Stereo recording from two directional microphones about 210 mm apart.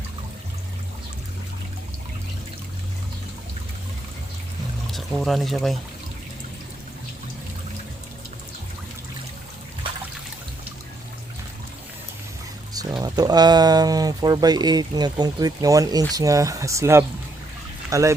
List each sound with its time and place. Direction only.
4.9 s speech: centre (ahead or behind)
13.0 s speech: 20° right (ahead or behind)